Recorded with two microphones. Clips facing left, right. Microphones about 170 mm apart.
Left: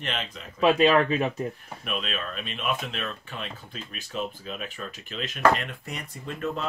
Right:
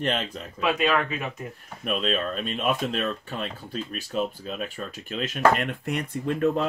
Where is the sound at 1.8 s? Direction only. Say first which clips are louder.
Right 7 dB; 40° right (ahead or behind).